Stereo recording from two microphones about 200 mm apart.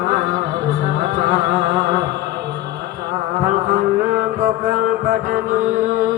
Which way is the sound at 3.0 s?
40° right (ahead or behind).